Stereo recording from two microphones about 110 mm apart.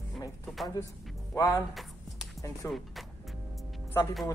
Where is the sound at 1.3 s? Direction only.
30° left (ahead or behind).